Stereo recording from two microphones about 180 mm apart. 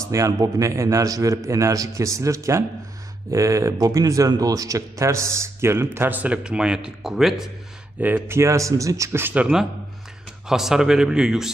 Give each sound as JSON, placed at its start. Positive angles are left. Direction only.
{"t": 0.0, "sound": "a man's voice", "side_deg": -15}
{"t": 8.0, "sound": "a man's voice", "side_deg": -10}